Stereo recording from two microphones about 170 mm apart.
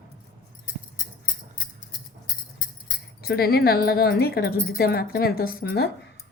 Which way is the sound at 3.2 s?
65° left (ahead or behind).